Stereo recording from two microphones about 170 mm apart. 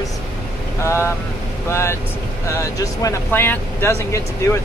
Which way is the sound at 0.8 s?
15° left (ahead or behind).